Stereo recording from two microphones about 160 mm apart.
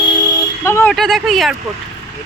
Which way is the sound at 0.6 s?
15° left (ahead or behind).